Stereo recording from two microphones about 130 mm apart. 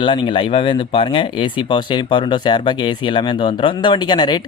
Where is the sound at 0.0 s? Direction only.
40° left (ahead or behind).